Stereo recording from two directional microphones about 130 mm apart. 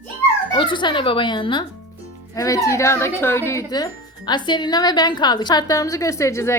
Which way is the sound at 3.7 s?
35° left (ahead or behind).